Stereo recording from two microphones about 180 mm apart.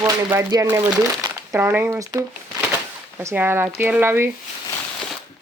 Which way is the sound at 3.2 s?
15° right (ahead or behind).